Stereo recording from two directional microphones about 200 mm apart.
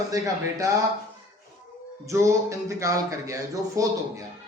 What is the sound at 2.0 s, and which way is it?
A man's voice, 15° right (ahead or behind).